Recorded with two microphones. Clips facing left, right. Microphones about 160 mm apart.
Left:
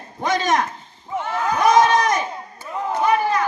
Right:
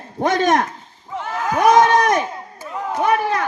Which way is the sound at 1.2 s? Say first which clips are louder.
Even; 5° right (ahead or behind).